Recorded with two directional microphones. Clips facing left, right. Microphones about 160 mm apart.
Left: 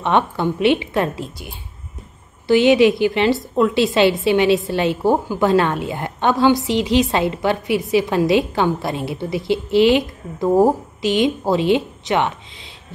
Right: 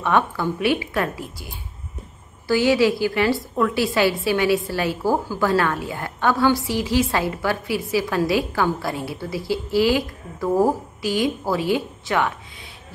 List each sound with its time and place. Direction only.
0.0 s a woman's voice: 20° left (ahead or behind)